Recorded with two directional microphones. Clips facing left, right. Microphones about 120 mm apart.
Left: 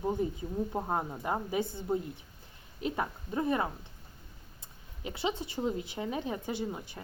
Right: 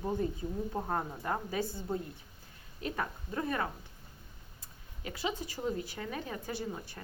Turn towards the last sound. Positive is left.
turn(degrees=15)  # may be behind; listen again after turning